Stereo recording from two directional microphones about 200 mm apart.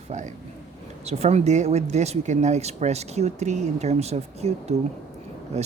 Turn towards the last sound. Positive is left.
turn(degrees=-35)  # may be behind; listen again after turning